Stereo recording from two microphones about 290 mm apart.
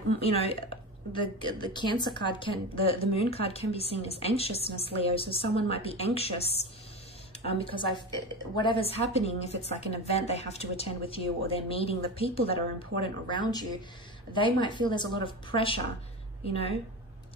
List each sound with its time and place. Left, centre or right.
0.2 s a woman's voice: left